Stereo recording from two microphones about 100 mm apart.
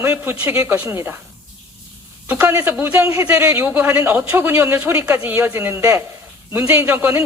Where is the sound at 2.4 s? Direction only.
30° right (ahead or behind).